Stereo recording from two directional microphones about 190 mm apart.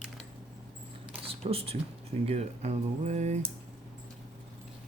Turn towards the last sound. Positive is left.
turn(degrees=-35)  # may be behind; listen again after turning